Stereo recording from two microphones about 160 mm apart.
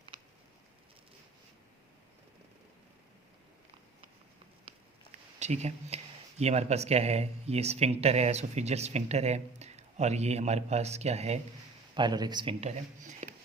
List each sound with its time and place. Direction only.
4.7 s a sound: 35° right (ahead or behind)
5.4 s speech: 45° right (ahead or behind)
11.9 s speech: 25° right (ahead or behind); by 13.3 s 45° right (ahead or behind)